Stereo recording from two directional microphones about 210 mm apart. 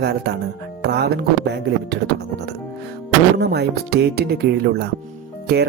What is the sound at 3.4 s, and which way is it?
Speech, 50° right (ahead or behind).